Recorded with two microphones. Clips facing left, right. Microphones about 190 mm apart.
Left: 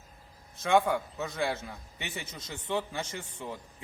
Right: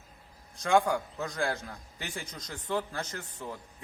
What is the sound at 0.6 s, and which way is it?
A man's voice, centre (ahead or behind).